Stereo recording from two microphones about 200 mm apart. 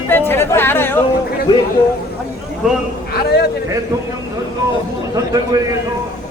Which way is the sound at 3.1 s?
55° left (ahead or behind).